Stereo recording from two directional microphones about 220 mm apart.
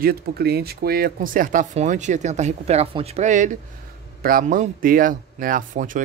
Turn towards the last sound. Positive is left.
turn(degrees=-35)  # may be behind; listen again after turning